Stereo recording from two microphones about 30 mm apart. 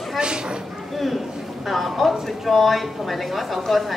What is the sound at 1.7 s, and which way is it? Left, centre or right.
A woman's voice, centre.